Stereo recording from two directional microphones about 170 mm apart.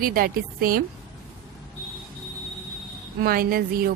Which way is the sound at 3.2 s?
60° right (ahead or behind).